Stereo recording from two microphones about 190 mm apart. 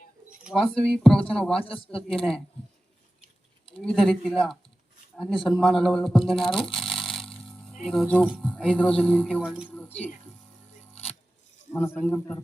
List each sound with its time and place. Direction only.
0.3 s speech: centre (ahead or behind)
1.8 s speech: 30° left (ahead or behind)
3.8 s speech: centre (ahead or behind)
6.6 s a sound: centre (ahead or behind)
7.8 s speech: centre (ahead or behind)
9.4 s speech: 5° right (ahead or behind)
9.6 s speech: 10° left (ahead or behind)
11.7 s a man's voice: 10° left (ahead or behind)